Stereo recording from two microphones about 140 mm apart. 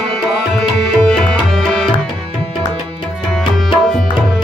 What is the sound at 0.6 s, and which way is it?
Tabla, 5° left (ahead or behind).